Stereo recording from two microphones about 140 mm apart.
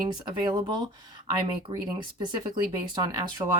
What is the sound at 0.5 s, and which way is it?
Speech, 30° right (ahead or behind).